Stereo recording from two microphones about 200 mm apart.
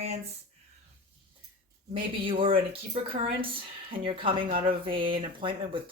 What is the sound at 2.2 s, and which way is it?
Speech, 25° right (ahead or behind).